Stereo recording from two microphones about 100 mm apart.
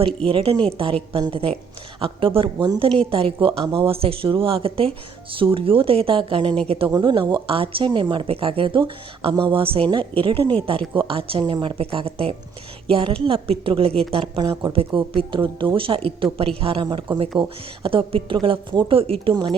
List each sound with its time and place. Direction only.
0.3 s speech: 60° right (ahead or behind)
6.9 s speech: 50° right (ahead or behind)
11.8 s speech: 70° right (ahead or behind)
16.8 s speech: 55° right (ahead or behind)
19.3 s speech: 50° right (ahead or behind)